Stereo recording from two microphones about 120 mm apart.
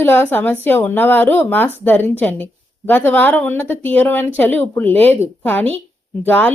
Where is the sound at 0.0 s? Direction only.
15° left (ahead or behind).